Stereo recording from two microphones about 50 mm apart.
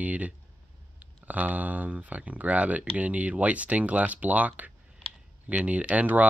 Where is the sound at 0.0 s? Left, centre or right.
Right.